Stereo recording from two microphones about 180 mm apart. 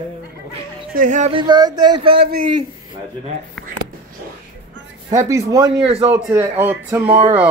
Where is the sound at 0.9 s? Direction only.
45° right (ahead or behind).